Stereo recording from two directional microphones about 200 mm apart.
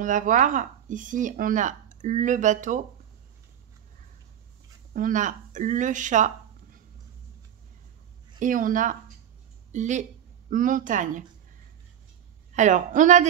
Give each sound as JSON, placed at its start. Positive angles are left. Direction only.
{"t": 0.0, "sound": "speech", "side_deg": -40}
{"t": 4.9, "sound": "speech", "side_deg": -40}
{"t": 8.4, "sound": "speech", "side_deg": -40}
{"t": 12.5, "sound": "speech", "side_deg": -40}